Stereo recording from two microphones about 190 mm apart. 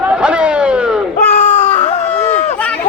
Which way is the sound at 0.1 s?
5° right (ahead or behind).